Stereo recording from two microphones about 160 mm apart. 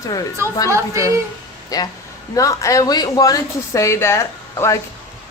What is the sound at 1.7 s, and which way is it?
A woman's voice, 20° left (ahead or behind).